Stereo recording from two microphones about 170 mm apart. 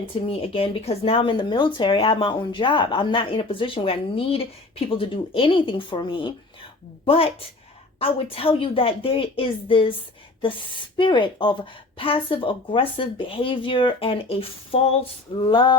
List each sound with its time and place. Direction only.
0.3 s a woman's voice: 30° left (ahead or behind)